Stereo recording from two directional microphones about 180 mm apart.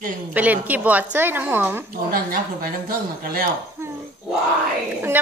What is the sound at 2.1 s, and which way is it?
Speech, 55° right (ahead or behind).